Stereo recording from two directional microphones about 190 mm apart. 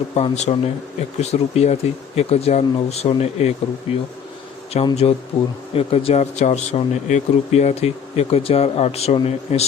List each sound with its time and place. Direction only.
0.1 s speech: 35° left (ahead or behind)